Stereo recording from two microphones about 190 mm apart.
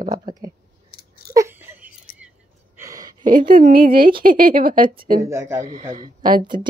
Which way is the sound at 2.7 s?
15° right (ahead or behind).